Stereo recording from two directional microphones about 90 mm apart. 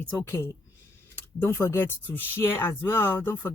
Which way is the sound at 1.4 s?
25° left (ahead or behind).